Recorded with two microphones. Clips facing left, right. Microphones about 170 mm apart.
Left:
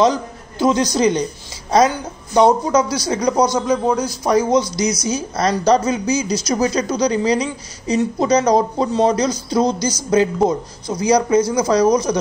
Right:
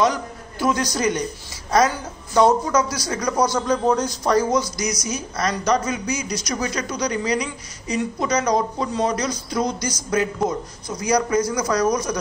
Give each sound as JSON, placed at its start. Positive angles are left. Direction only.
{"t": 0.0, "sound": "a man's voice", "side_deg": 25}
{"t": 3.6, "sound": "a man's voice", "side_deg": 5}
{"t": 4.6, "sound": "speech", "side_deg": 25}